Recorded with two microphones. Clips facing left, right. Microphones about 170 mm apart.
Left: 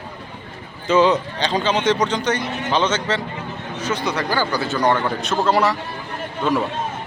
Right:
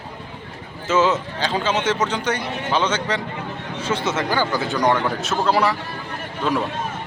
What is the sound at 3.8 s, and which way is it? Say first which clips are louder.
A man's voice: even; 30° right (ahead or behind).